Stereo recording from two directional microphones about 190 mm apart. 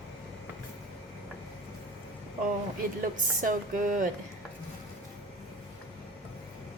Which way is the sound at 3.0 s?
45° right (ahead or behind).